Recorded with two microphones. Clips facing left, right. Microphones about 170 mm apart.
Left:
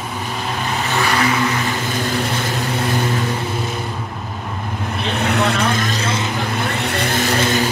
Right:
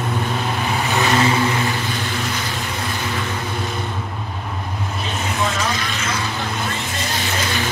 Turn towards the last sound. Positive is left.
turn(degrees=45)  # may be behind; listen again after turning